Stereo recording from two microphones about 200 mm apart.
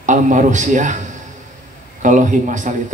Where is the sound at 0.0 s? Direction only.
40° right (ahead or behind).